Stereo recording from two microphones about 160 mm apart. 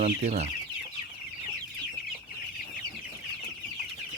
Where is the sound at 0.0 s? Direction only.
45° right (ahead or behind).